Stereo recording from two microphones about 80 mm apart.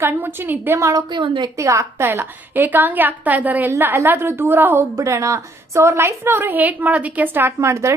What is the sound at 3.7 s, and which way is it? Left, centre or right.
A woman's voice, right.